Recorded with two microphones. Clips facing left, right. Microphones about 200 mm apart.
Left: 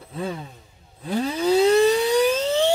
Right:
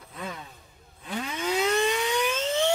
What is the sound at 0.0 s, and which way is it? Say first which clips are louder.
Vehicle: left 8 dB; 30° left (ahead or behind).